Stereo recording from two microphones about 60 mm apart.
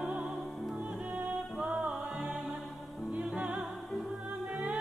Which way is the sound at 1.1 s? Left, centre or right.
Right.